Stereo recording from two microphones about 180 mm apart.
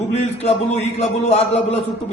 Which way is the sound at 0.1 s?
35° left (ahead or behind).